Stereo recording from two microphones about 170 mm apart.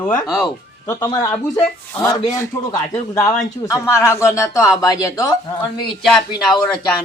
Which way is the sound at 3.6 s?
15° left (ahead or behind).